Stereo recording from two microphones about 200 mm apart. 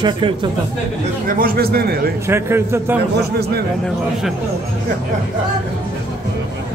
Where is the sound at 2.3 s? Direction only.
10° right (ahead or behind).